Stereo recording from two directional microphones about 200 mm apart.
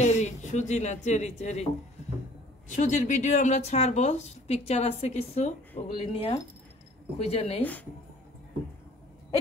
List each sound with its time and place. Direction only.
0.0 s speech: 35° left (ahead or behind)
2.7 s speech: 40° left (ahead or behind)